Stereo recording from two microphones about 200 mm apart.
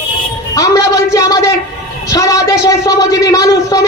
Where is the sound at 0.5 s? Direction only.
15° left (ahead or behind).